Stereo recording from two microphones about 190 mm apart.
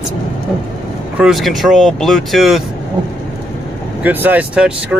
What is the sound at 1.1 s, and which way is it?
Speech, centre (ahead or behind).